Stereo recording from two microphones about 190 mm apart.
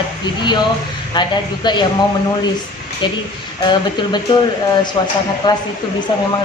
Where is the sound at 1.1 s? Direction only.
25° left (ahead or behind).